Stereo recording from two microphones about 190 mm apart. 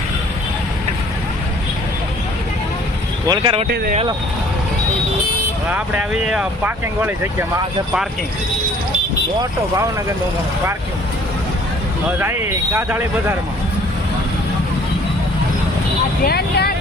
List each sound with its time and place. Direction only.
3.2 s speech: 30° right (ahead or behind)
5.7 s speech: 10° right (ahead or behind)
12.2 s speech: 10° right (ahead or behind)
16.2 s speech: 55° left (ahead or behind)